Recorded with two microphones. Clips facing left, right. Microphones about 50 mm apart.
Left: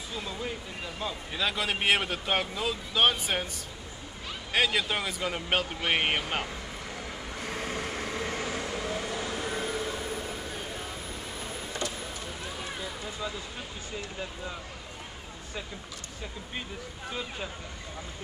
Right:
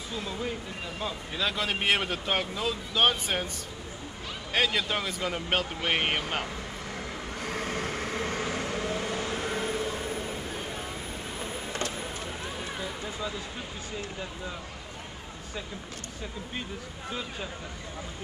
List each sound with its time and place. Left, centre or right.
0.1 s speech: centre
4.5 s speech: centre
7.3 s vehicle: right
17.1 s speech: centre